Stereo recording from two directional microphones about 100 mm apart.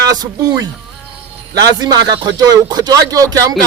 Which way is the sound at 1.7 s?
45° right (ahead or behind).